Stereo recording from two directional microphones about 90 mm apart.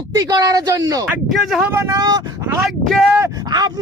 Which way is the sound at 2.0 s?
50° right (ahead or behind).